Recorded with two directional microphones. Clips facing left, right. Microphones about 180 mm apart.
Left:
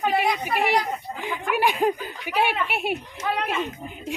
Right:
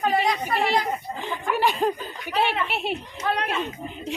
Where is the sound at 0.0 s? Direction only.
10° left (ahead or behind).